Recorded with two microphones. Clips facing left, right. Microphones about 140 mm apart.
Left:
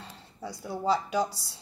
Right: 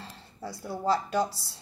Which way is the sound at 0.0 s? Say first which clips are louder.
Even; centre (ahead or behind).